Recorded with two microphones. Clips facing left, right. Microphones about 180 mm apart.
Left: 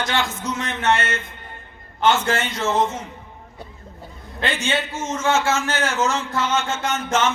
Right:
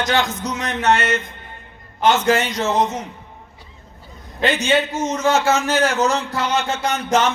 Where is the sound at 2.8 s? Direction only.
20° right (ahead or behind).